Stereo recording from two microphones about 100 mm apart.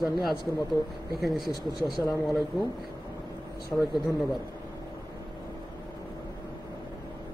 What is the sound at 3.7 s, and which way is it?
Speech, 10° left (ahead or behind).